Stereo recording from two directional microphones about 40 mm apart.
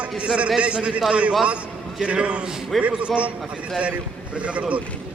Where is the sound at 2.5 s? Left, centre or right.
Centre.